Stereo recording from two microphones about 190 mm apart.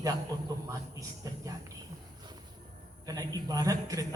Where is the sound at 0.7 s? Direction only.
20° right (ahead or behind).